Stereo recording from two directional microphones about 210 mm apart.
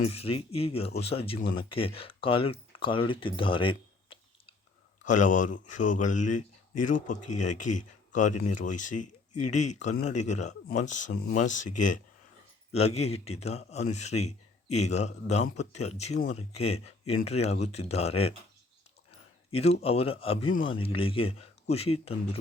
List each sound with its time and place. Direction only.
0.0 s speech: 30° left (ahead or behind)
5.0 s a man's voice: 35° left (ahead or behind)
19.5 s speech: 30° left (ahead or behind)